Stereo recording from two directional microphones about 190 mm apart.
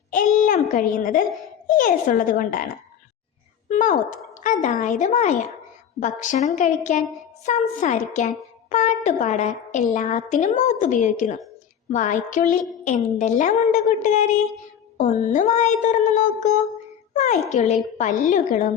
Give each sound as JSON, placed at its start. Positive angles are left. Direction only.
{"t": 0.1, "sound": "speech", "side_deg": 45}
{"t": 3.7, "sound": "a woman's voice", "side_deg": 40}
{"t": 17.5, "sound": "a woman's voice", "side_deg": 40}